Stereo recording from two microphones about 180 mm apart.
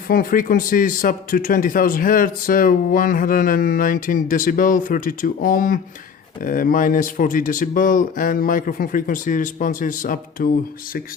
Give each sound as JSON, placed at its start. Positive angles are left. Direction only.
{"t": 0.1, "sound": "speech", "side_deg": 50}